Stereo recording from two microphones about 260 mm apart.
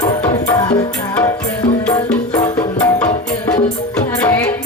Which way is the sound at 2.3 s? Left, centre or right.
Centre.